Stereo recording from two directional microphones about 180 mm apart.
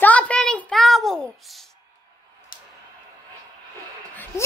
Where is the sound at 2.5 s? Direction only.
50° left (ahead or behind).